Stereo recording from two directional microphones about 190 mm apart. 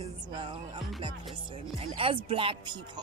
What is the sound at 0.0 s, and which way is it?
Music, 25° right (ahead or behind).